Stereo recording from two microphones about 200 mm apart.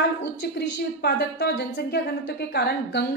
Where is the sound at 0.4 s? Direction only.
55° left (ahead or behind).